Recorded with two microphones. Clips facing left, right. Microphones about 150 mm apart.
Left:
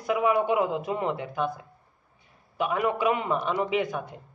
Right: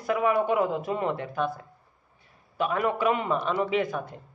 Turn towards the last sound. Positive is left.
turn(degrees=15)  # may be behind; listen again after turning